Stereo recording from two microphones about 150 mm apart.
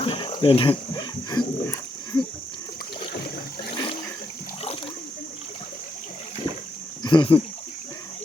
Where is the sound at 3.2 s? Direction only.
90° left.